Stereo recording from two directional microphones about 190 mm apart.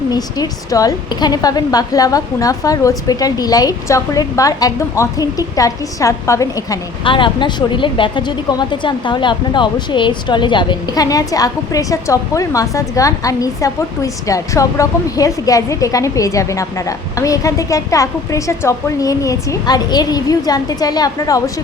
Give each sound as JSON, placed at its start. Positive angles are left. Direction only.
{"t": 0.1, "sound": "a woman's voice", "side_deg": 20}